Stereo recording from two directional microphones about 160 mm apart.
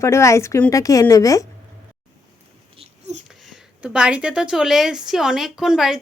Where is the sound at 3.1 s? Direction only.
45° right (ahead or behind).